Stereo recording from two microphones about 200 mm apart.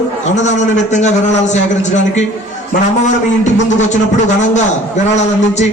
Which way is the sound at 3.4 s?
35° left (ahead or behind).